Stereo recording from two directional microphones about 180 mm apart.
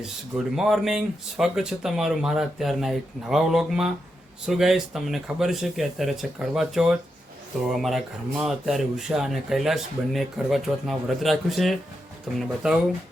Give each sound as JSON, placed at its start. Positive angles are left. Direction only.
{"t": 0.0, "sound": "speech", "side_deg": -5}